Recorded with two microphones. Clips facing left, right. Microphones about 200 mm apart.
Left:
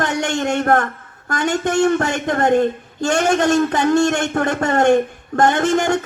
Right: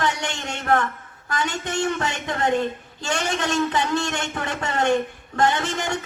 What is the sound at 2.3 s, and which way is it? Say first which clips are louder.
A man's voice: left 7 dB; 50° left (ahead or behind).